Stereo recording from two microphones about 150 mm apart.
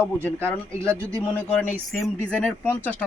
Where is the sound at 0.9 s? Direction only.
20° right (ahead or behind).